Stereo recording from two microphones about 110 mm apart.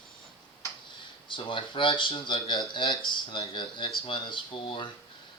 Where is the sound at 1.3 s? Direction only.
50° left (ahead or behind).